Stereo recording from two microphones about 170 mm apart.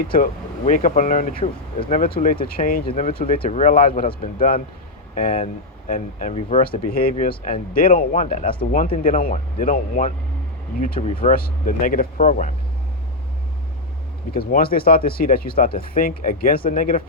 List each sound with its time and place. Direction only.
0.1 s speech: 50° left (ahead or behind)
1.9 s speech: 60° left (ahead or behind)
3.3 s speech: 30° left (ahead or behind)
3.6 s speech: 50° left (ahead or behind)
6.6 s speech: 60° left (ahead or behind)
11.0 s speech: 35° left (ahead or behind)
11.3 s speech: 55° left (ahead or behind)
14.3 s speech: 60° left (ahead or behind)